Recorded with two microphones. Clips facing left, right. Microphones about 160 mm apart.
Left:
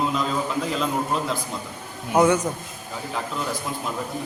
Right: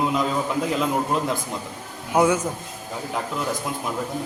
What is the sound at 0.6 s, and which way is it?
A man's voice, 15° right (ahead or behind).